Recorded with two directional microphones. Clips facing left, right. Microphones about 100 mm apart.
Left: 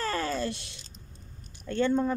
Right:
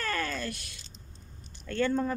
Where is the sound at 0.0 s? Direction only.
25° left (ahead or behind).